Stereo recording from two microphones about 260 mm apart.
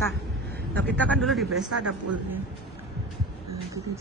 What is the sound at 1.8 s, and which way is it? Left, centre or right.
Speech, right.